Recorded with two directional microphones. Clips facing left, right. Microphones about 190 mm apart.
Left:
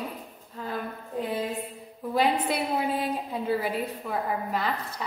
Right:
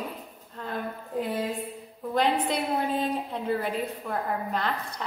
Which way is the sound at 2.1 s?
5° left (ahead or behind).